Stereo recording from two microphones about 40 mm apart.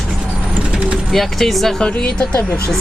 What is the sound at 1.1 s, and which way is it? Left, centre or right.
Speech, centre.